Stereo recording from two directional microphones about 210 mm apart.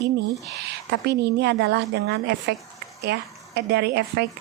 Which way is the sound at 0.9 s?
55° right (ahead or behind).